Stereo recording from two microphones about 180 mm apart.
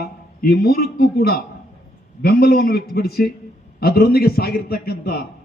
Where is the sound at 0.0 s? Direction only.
60° left (ahead or behind).